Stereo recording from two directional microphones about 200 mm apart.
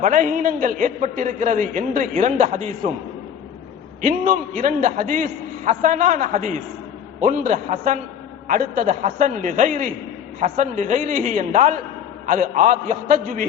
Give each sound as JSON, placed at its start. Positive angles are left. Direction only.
{"t": 0.0, "sound": "a man's voice", "side_deg": -40}
{"t": 4.0, "sound": "a man's voice", "side_deg": -40}